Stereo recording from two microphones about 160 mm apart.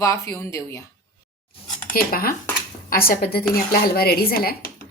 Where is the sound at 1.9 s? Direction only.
65° left (ahead or behind).